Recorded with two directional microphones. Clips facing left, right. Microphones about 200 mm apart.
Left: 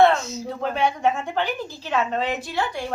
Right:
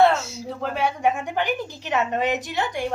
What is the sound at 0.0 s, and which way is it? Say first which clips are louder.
A woman's voice: left 1 dB; 5° right (ahead or behind).